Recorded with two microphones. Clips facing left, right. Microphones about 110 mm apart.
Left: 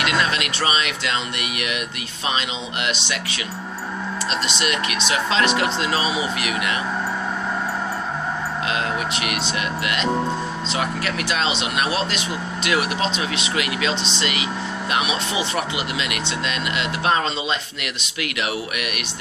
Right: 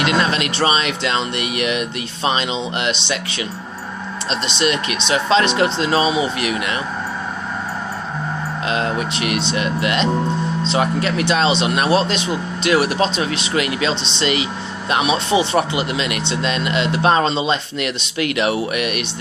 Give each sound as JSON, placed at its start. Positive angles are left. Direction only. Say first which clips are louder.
{"t": 0.0, "sound": "speech", "louder": "right 4 dB", "side_deg": -30}
{"t": 2.8, "sound": "speech", "louder": "right 4 dB", "side_deg": -30}
{"t": 4.4, "sound": "speech", "louder": "right 8 dB", "side_deg": -25}
{"t": 8.6, "sound": "speech", "louder": "right 5 dB", "side_deg": -35}